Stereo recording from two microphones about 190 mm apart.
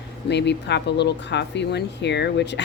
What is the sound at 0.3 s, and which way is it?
Speech, 65° left (ahead or behind).